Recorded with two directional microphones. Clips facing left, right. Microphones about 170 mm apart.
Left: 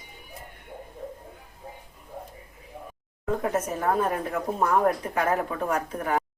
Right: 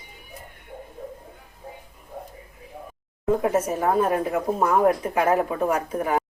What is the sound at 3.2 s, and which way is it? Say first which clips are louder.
Speech: right 5 dB; 10° right (ahead or behind).